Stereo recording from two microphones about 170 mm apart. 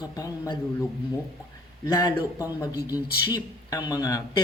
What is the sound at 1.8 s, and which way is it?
Speech, 25° left (ahead or behind).